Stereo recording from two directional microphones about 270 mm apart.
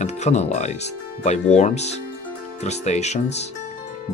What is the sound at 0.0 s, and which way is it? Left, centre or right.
Speech, left.